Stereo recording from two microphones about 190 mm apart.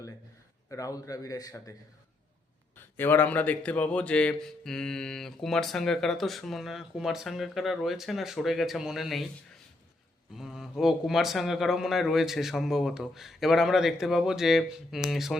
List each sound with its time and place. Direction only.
0.7 s a man's voice: 15° left (ahead or behind)
2.7 s a man's voice: 10° left (ahead or behind)
10.3 s a man's voice: centre (ahead or behind)